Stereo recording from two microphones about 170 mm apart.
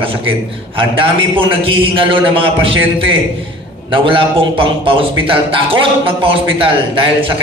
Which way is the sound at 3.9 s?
30° right (ahead or behind).